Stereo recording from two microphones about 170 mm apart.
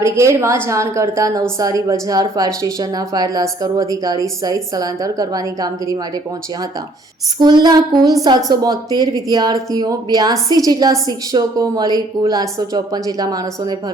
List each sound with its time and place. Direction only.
0.0 s a woman's voice: 15° right (ahead or behind)
7.3 s a woman's voice: 25° right (ahead or behind)